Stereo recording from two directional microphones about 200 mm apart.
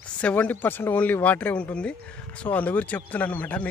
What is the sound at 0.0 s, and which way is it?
Speech, 5° left (ahead or behind).